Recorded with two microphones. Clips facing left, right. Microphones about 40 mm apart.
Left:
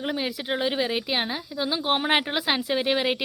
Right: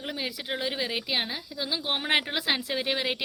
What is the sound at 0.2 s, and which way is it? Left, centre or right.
A woman's voice, left.